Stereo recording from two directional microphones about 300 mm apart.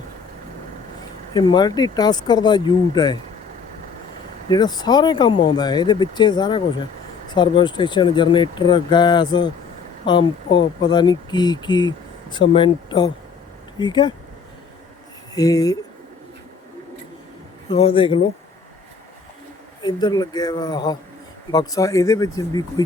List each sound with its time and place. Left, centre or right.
1.3 s speech: centre
4.4 s speech: centre
15.4 s speech: centre
17.7 s speech: centre
19.8 s speech: centre